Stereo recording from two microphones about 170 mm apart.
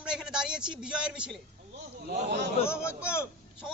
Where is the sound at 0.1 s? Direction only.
5° right (ahead or behind).